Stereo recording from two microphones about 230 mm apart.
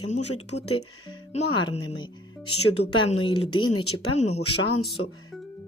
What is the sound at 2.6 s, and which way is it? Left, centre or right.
Speech, left.